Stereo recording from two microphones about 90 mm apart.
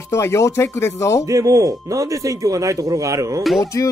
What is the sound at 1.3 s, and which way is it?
A man's voice, 40° right (ahead or behind).